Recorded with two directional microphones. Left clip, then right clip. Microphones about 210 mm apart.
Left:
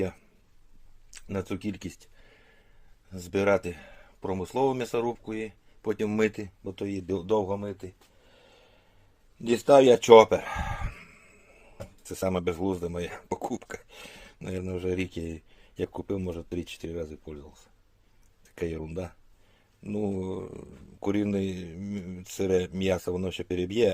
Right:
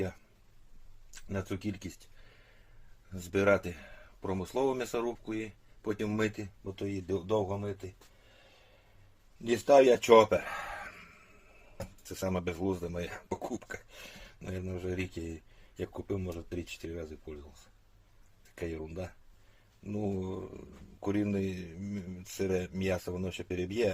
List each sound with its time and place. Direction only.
1.1 s speech: 45° left (ahead or behind)
9.4 s speech: 40° left (ahead or behind)
12.0 s speech: 35° left (ahead or behind)